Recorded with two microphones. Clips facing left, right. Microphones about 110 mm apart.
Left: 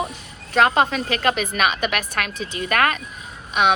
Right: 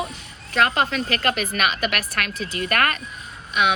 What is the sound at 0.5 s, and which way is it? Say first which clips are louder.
A woman's voice: left 3 dB; 45° left (ahead or behind).